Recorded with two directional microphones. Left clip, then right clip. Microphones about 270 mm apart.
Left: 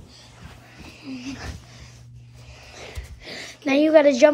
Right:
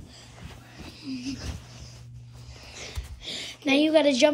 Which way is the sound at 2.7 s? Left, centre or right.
Centre.